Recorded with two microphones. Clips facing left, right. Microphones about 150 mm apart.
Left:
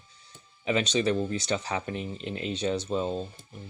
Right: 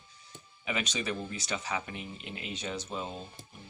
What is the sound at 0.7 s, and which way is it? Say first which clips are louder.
Speech: left 8 dB; 30° left (ahead or behind).